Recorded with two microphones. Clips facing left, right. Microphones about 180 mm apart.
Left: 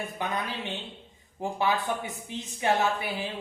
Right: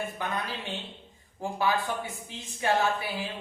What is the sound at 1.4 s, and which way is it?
Speech, 20° left (ahead or behind).